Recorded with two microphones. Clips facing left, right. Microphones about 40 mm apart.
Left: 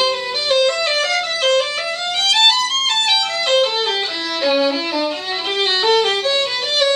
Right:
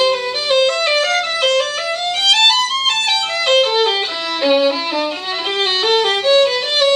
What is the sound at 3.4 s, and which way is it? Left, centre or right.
Violin, centre.